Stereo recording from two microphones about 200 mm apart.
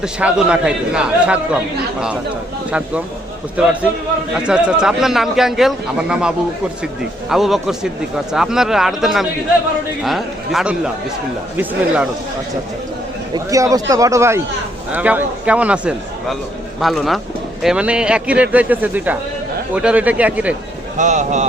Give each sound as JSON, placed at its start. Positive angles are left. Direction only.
{"t": 0.0, "sound": "a man's voice", "side_deg": -5}
{"t": 4.4, "sound": "a man's voice", "side_deg": -5}
{"t": 13.3, "sound": "a man's voice", "side_deg": -15}
{"t": 21.0, "sound": "speech", "side_deg": -35}